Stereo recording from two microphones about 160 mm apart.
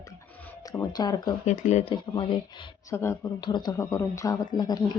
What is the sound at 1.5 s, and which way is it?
Speech, 45° left (ahead or behind).